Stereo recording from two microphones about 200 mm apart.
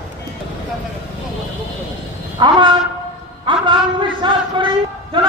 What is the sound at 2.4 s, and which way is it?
Train, 20° right (ahead or behind).